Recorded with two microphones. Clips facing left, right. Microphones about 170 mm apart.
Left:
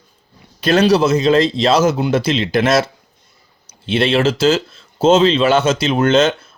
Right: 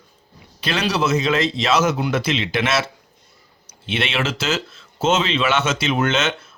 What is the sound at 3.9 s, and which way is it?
A man's voice, 35° left (ahead or behind).